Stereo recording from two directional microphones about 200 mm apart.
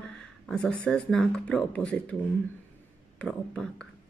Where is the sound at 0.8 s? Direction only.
5° left (ahead or behind).